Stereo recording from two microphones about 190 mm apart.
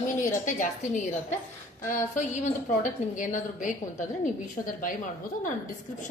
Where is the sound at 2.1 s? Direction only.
40° left (ahead or behind).